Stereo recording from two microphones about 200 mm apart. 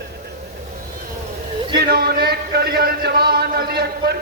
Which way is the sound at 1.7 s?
50° right (ahead or behind).